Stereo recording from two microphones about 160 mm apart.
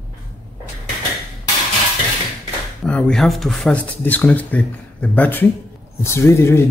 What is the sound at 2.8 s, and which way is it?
Speech, 5° left (ahead or behind).